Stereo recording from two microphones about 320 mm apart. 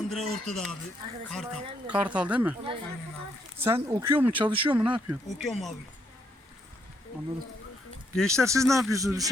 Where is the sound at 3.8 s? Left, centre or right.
Centre.